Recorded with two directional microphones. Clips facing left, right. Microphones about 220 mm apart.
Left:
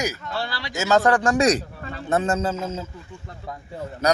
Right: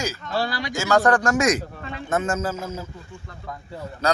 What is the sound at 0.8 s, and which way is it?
Speech, 20° left (ahead or behind).